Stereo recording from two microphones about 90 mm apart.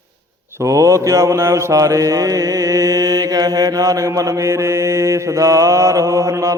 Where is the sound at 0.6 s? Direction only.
35° right (ahead or behind).